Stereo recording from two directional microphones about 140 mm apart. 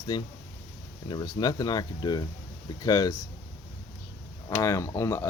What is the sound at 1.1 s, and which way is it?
Speech, 30° left (ahead or behind).